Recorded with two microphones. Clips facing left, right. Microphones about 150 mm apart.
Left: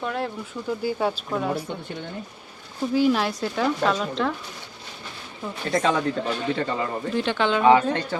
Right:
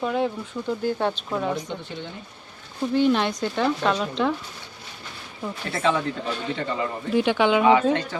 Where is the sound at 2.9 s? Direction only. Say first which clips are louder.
Even; 5° left (ahead or behind).